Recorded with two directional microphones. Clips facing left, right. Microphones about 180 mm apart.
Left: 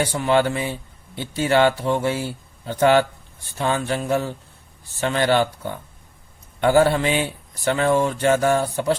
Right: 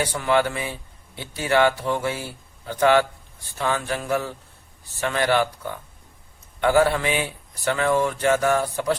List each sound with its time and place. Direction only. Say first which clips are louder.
0.0 s speech: left 2 dB; 25° left (ahead or behind)